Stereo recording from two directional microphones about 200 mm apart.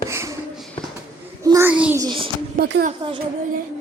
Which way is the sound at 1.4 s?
15° right (ahead or behind).